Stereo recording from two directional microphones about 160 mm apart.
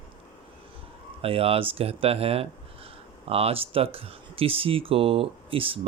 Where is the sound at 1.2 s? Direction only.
35° right (ahead or behind).